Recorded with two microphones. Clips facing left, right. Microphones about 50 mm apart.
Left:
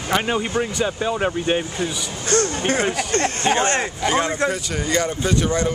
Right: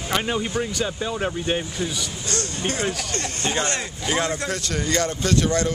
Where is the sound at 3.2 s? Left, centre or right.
Left.